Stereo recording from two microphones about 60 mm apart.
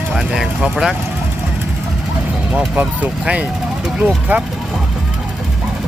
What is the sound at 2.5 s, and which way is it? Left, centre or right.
Speech, right.